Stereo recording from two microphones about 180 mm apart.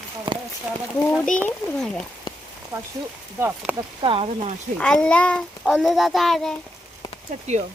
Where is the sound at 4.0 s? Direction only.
30° right (ahead or behind).